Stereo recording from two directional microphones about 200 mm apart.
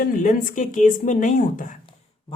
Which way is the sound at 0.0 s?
40° left (ahead or behind).